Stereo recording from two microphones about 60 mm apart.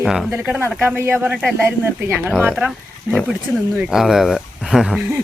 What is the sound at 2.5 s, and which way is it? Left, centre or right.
Speech, centre.